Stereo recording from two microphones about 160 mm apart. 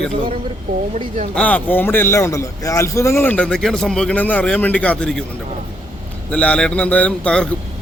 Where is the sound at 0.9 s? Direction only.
45° right (ahead or behind).